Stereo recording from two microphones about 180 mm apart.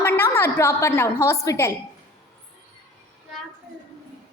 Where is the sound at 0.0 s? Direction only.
10° left (ahead or behind).